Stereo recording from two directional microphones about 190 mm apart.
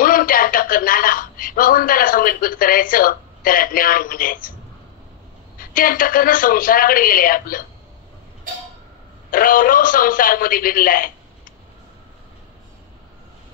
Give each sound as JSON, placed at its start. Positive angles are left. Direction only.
{"t": 0.0, "sound": "a sound", "side_deg": 50}
{"t": 5.6, "sound": "speech", "side_deg": 50}
{"t": 9.3, "sound": "speech", "side_deg": 45}